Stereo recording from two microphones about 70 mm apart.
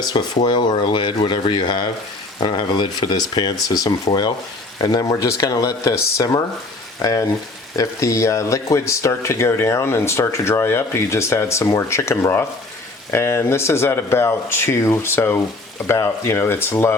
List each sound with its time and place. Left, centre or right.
0.0 s speech: left